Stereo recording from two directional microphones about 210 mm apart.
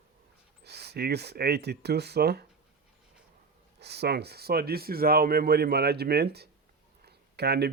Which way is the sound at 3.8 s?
50° right (ahead or behind).